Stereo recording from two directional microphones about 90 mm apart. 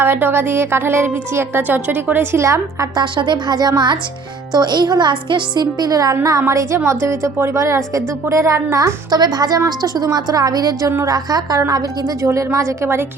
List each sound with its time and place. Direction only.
0.0 s a woman's voice: 25° right (ahead or behind)
2.9 s a woman's voice: 55° right (ahead or behind)
12.2 s a woman's voice: 35° right (ahead or behind)